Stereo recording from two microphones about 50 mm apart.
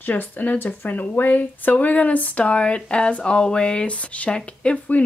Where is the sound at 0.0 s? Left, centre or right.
Left.